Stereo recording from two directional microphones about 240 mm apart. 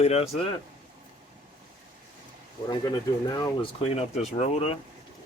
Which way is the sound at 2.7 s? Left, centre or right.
Centre.